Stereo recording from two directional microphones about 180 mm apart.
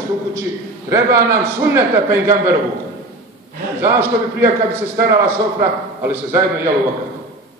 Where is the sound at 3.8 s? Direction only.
15° right (ahead or behind).